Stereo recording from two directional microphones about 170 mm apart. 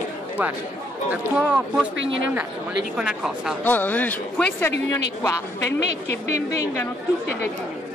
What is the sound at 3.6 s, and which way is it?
Speech, 10° left (ahead or behind).